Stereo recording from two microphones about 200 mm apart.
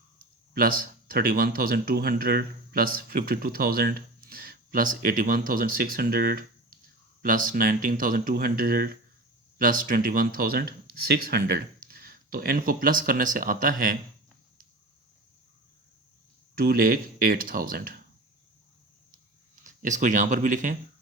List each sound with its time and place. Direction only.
0.5 s speech: 45° right (ahead or behind)
16.6 s speech: 50° right (ahead or behind)
19.6 s speech: 40° right (ahead or behind)